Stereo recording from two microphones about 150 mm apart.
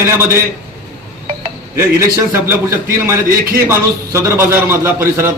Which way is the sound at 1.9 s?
20° right (ahead or behind).